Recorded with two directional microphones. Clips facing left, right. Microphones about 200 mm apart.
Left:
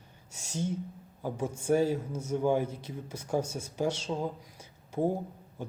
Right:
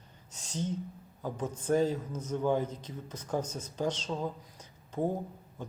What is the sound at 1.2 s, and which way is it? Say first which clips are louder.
Speech: left 2 dB; 10° left (ahead or behind).